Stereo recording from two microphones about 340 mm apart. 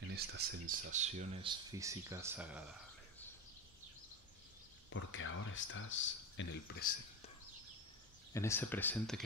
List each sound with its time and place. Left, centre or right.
0.1 s speech: right; by 2.6 s centre
4.8 s speech: left
8.3 s speech: centre